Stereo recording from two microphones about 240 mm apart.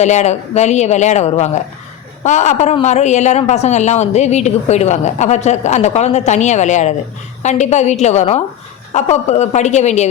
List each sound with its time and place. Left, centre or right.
0.0 s a woman's voice: left